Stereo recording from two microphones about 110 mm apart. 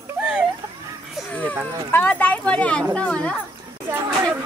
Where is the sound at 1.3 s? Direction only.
15° left (ahead or behind).